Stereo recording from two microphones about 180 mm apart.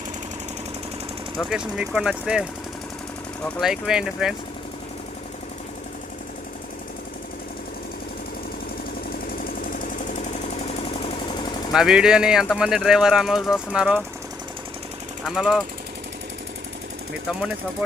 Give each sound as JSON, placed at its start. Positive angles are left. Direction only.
{"t": 1.4, "sound": "speech", "side_deg": -5}
{"t": 11.7, "sound": "speech", "side_deg": -5}
{"t": 15.2, "sound": "speech", "side_deg": -5}
{"t": 17.2, "sound": "speech", "side_deg": -5}